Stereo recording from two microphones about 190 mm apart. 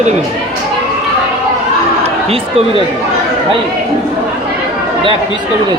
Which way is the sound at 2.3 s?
30° right (ahead or behind).